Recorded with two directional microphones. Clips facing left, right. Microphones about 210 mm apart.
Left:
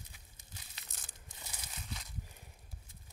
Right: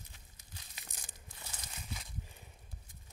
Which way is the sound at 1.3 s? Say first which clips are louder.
Even; 20° left (ahead or behind).